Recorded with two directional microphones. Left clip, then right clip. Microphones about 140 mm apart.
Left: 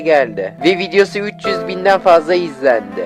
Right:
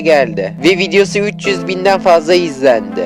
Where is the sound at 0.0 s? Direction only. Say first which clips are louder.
Right 2 dB; 50° right (ahead or behind).